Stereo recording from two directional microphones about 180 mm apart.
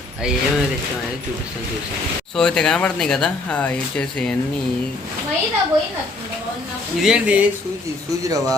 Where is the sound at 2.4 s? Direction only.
5° left (ahead or behind).